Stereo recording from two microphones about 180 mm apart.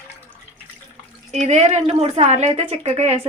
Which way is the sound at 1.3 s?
40° right (ahead or behind).